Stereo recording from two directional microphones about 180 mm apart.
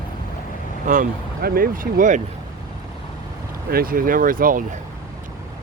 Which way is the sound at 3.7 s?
55° right (ahead or behind).